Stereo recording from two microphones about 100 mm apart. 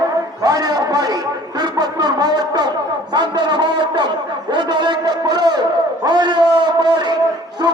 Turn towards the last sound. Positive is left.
turn(degrees=-40)  # may be behind; listen again after turning